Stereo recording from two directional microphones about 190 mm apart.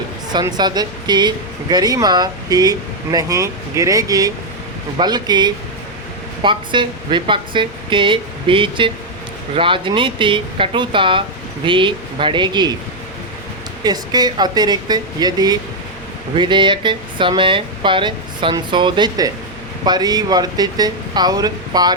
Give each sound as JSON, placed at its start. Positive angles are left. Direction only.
{"t": 0.3, "sound": "speech", "side_deg": -20}
{"t": 13.8, "sound": "speech", "side_deg": -20}